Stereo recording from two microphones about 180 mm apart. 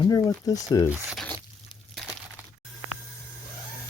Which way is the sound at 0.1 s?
20° left (ahead or behind).